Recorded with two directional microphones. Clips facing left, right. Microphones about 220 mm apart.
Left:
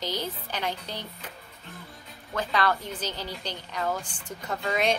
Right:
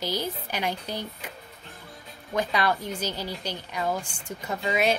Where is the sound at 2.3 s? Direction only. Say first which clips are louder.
Right 1 dB; 15° right (ahead or behind).